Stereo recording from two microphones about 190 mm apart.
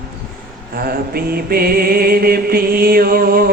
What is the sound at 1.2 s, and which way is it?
Music, 55° right (ahead or behind).